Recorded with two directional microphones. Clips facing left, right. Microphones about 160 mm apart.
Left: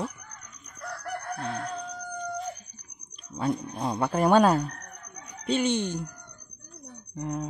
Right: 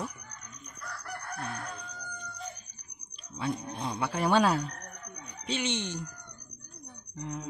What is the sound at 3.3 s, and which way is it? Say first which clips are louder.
Speech: left 5 dB; 45° left (ahead or behind).